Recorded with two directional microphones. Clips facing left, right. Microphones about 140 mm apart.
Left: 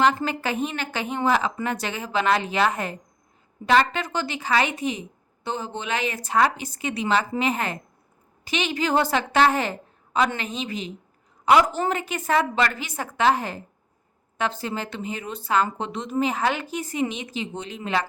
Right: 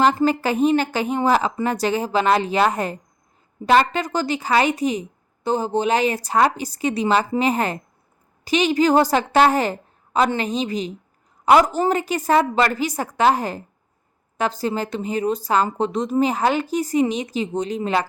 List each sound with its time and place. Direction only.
0.0 s a woman's voice: 35° right (ahead or behind)